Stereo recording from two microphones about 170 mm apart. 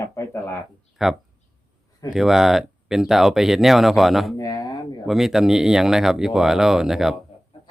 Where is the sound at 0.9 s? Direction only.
Centre (ahead or behind).